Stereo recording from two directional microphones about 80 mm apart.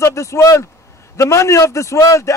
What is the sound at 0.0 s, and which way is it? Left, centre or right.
A man's voice, left.